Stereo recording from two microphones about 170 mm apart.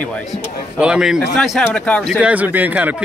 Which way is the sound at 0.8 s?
5° right (ahead or behind).